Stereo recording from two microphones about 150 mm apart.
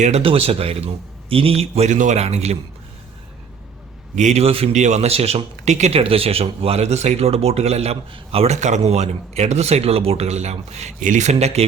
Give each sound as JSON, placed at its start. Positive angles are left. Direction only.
{"t": 0.0, "sound": "speech", "side_deg": -40}
{"t": 4.1, "sound": "speech", "side_deg": -50}